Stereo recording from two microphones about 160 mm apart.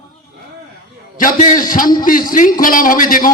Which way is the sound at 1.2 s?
60° left (ahead or behind).